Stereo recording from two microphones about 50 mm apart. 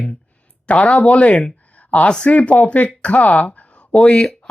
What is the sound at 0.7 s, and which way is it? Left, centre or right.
Speech, left.